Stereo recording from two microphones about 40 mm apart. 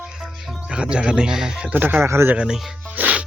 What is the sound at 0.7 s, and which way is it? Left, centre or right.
Speech, right.